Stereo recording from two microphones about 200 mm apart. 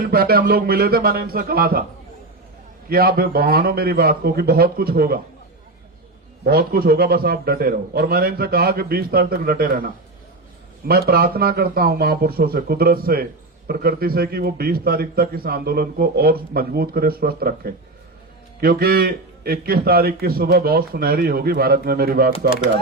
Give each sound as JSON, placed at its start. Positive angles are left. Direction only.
{"t": 0.1, "sound": "a man's voice", "side_deg": -50}
{"t": 2.9, "sound": "a man's voice", "side_deg": -50}
{"t": 6.4, "sound": "a man's voice", "side_deg": -50}